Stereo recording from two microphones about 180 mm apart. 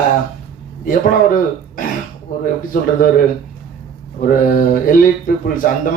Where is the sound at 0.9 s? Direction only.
50° left (ahead or behind).